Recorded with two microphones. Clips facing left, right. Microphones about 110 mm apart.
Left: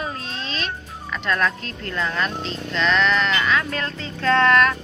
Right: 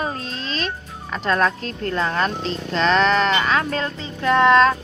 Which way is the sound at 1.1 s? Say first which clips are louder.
Right 3 dB; 35° right (ahead or behind).